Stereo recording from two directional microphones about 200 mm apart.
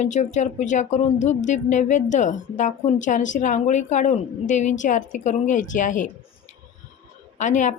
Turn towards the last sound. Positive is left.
turn(degrees=40)  # may be behind; listen again after turning